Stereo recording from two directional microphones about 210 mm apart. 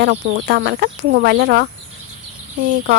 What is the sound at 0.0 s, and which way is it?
Speech, 55° right (ahead or behind).